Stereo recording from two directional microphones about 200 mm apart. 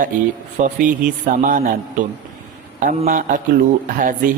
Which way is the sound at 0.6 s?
40° right (ahead or behind).